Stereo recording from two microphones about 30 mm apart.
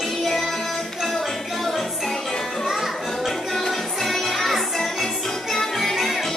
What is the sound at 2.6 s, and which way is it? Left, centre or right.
Music, centre.